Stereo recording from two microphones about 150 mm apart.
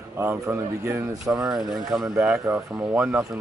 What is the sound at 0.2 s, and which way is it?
Speech, 15° right (ahead or behind).